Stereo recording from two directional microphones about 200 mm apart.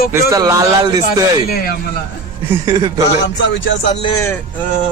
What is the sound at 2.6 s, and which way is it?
Speech, 15° right (ahead or behind).